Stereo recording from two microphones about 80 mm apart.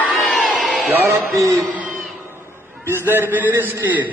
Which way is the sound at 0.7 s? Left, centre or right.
Centre.